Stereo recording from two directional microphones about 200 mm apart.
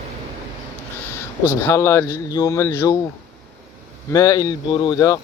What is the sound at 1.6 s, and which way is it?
Speech, 15° left (ahead or behind).